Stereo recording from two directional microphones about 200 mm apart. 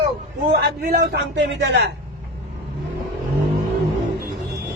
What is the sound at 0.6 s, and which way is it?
Speech, 50° right (ahead or behind).